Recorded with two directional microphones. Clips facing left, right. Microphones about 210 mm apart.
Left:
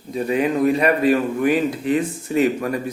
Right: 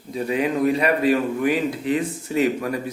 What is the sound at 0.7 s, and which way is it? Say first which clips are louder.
Speech: left 2 dB; 45° left (ahead or behind).